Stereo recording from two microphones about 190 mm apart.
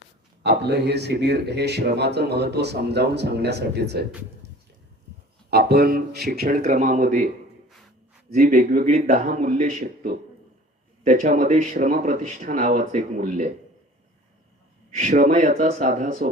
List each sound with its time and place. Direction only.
0.4 s speech: 60° right (ahead or behind)
5.5 s speech: 55° right (ahead or behind)
8.3 s speech: 45° right (ahead or behind)
14.8 s speech: 40° right (ahead or behind)